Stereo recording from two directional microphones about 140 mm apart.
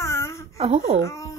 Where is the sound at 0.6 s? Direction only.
50° right (ahead or behind).